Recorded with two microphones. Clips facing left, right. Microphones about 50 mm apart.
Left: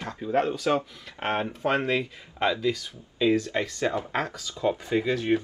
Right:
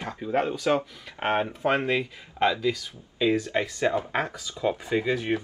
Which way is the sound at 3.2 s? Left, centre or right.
Centre.